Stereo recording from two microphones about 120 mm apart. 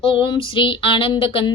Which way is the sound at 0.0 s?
45° left (ahead or behind).